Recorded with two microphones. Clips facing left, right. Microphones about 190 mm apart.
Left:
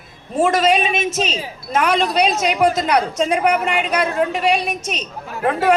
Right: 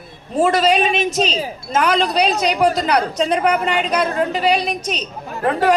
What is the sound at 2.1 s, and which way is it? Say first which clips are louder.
Speech: even; 35° right (ahead or behind).